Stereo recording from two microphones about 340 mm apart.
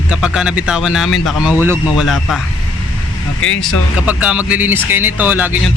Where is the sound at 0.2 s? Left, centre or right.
Centre.